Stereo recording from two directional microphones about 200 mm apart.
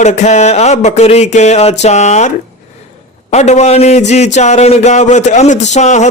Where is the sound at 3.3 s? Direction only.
35° left (ahead or behind).